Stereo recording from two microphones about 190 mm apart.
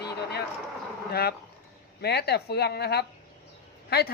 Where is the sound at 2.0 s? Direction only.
55° left (ahead or behind).